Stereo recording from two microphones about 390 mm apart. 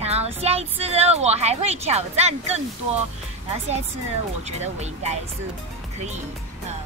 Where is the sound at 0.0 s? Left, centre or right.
Centre.